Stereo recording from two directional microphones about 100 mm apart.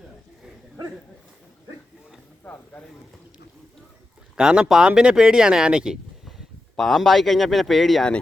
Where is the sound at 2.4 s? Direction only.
15° left (ahead or behind).